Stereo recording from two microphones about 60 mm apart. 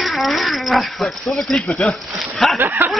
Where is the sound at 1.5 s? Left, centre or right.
Centre.